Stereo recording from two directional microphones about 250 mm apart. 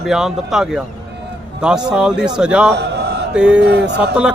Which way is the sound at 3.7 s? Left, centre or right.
Right.